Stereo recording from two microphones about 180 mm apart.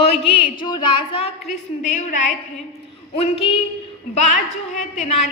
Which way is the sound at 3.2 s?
35° left (ahead or behind).